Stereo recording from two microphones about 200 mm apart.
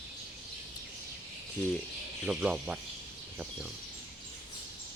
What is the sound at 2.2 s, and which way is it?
Speech, 5° right (ahead or behind).